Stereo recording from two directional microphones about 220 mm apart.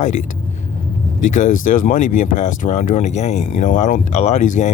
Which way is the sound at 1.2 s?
35° left (ahead or behind).